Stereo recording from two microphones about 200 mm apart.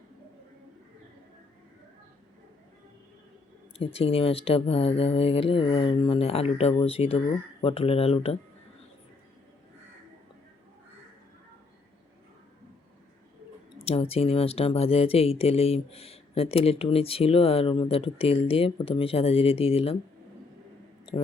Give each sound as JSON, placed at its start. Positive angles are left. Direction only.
{"t": 3.8, "sound": "speech", "side_deg": 30}
{"t": 13.8, "sound": "speech", "side_deg": 30}